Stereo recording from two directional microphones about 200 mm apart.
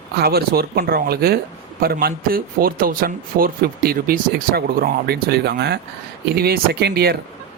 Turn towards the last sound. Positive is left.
turn(degrees=-55)  # may be behind; listen again after turning